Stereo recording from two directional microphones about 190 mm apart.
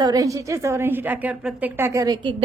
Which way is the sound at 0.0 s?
20° right (ahead or behind).